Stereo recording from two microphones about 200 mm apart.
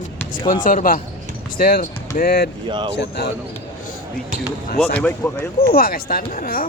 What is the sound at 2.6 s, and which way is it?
Speech, 25° right (ahead or behind).